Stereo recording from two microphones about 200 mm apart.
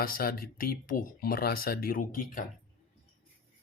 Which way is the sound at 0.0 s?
45° left (ahead or behind).